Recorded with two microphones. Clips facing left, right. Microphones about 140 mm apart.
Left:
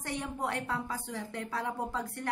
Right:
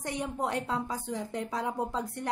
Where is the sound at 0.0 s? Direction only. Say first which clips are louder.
Right 3 dB; 20° right (ahead or behind).